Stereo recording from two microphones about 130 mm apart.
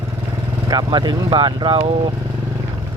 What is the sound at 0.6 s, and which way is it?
Speech, 30° right (ahead or behind).